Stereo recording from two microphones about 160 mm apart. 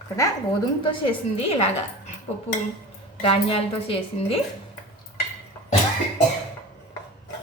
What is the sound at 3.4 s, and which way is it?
Speech, 35° left (ahead or behind).